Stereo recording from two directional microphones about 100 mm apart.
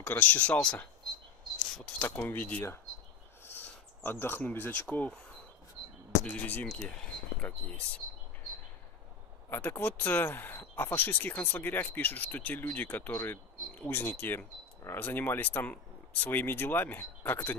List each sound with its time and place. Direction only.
0.0 s speech: 15° left (ahead or behind)
2.0 s speech: 20° left (ahead or behind)
9.5 s speech: 20° left (ahead or behind)